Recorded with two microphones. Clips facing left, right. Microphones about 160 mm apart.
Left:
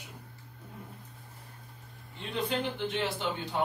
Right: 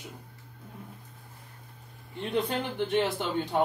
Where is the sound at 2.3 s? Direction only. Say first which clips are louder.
Right 3 dB; 55° right (ahead or behind).